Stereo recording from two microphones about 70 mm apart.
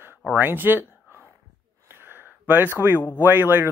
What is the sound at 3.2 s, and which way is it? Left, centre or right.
Speech, right.